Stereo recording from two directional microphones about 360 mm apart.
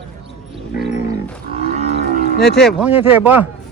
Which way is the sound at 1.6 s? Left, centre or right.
Centre.